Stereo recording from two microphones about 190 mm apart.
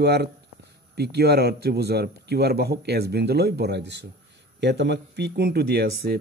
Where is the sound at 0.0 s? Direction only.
60° right (ahead or behind).